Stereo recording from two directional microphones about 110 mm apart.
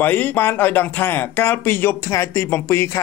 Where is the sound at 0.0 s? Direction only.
15° left (ahead or behind).